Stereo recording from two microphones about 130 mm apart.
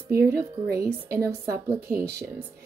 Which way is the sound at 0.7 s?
20° right (ahead or behind).